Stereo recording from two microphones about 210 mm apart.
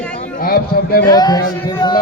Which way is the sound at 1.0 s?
20° left (ahead or behind).